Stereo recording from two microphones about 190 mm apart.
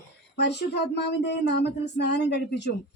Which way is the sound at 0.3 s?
60° left (ahead or behind).